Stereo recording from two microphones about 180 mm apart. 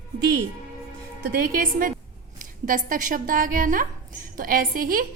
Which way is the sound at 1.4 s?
50° right (ahead or behind).